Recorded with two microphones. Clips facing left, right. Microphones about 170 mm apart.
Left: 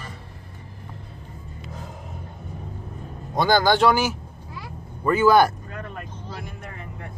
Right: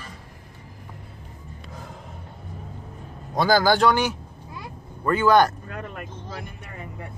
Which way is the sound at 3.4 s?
Centre (ahead or behind).